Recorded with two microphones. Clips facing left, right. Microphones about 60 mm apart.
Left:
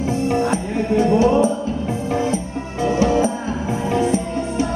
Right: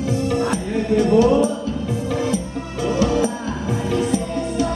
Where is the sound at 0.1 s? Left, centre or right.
Left.